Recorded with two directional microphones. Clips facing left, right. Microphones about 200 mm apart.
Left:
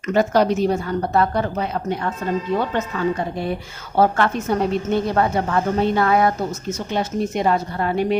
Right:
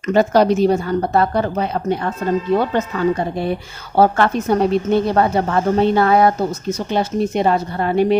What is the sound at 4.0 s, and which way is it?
Speech, 35° right (ahead or behind).